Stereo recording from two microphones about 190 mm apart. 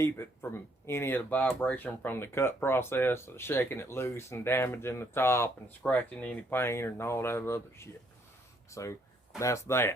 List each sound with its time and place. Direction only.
0.9 s speech: 10° left (ahead or behind)